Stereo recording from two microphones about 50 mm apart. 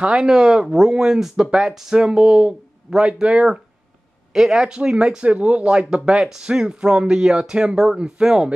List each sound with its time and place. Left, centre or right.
0.0 s speech: centre